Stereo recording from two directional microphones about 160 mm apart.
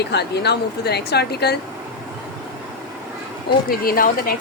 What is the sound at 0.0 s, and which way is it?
Speech, 90° left.